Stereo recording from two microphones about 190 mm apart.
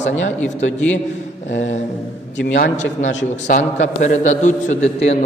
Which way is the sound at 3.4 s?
40° left (ahead or behind).